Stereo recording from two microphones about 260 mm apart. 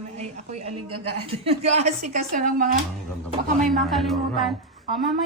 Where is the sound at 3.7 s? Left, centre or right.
Centre.